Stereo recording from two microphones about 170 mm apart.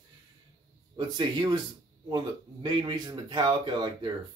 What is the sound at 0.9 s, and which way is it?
Speech, 25° right (ahead or behind).